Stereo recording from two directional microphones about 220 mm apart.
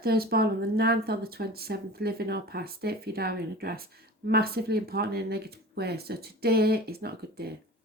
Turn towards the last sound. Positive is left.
turn(degrees=-45)  # may be behind; listen again after turning